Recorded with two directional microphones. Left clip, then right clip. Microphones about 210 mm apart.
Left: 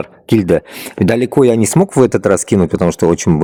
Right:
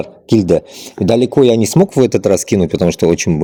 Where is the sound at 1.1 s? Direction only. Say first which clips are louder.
Right 1 dB; 60° left (ahead or behind); by 2.9 s 40° left (ahead or behind).